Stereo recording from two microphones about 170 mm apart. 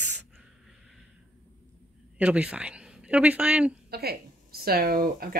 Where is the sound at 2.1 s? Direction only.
5° right (ahead or behind).